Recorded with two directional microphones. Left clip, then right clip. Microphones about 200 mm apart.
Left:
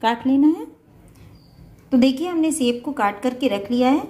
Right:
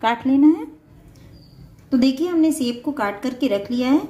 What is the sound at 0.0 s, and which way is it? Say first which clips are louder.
Speech: right 1 dB; 15° left (ahead or behind).